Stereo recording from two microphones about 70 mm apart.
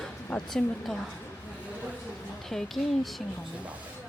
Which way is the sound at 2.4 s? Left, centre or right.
Centre.